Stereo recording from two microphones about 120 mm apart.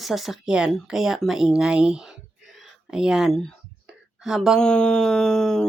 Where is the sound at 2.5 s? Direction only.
5° right (ahead or behind).